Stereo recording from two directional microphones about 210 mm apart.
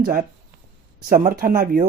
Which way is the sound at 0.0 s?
40° right (ahead or behind).